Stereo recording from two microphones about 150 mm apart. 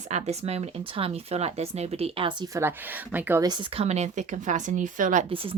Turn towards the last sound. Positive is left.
turn(degrees=-60)  # may be behind; listen again after turning